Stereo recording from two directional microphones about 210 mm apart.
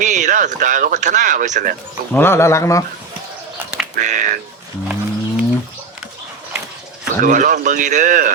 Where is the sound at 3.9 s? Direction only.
35° right (ahead or behind).